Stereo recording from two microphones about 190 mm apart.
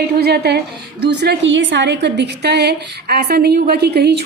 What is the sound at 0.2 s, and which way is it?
A woman's voice, 60° right (ahead or behind).